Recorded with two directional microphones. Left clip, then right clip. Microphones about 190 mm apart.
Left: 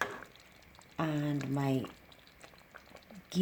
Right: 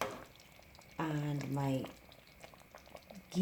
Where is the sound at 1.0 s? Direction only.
55° left (ahead or behind).